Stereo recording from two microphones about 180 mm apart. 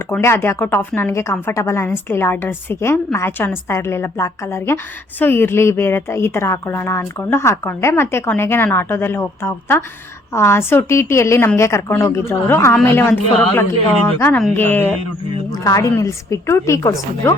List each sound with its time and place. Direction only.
0.1 s a woman's voice: 15° left (ahead or behind)